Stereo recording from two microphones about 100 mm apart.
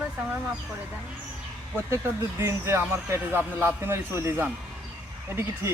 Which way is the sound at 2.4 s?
25° right (ahead or behind).